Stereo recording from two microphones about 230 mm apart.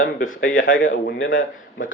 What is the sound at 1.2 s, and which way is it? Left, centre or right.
Speech, left.